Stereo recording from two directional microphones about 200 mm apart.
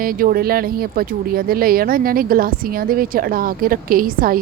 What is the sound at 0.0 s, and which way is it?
Speech, 45° right (ahead or behind).